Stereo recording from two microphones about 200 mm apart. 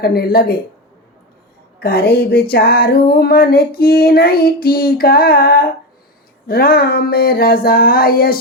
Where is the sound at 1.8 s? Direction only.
50° left (ahead or behind).